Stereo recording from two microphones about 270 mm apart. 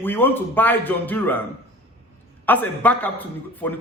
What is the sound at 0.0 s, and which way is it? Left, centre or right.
A man's voice, centre.